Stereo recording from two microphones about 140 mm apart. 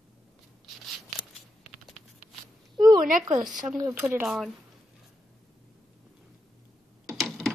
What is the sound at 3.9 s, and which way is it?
Speech, 15° right (ahead or behind).